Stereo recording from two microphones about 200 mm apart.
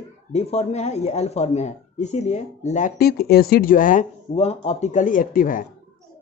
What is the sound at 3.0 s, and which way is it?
Speech, 50° left (ahead or behind).